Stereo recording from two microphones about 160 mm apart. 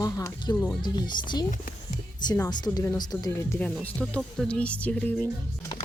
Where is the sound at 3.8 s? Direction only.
5° left (ahead or behind).